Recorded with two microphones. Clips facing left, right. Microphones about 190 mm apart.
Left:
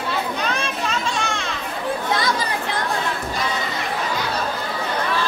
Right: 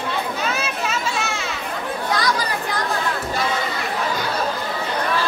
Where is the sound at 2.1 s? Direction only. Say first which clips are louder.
Right 1 dB; 25° left (ahead or behind).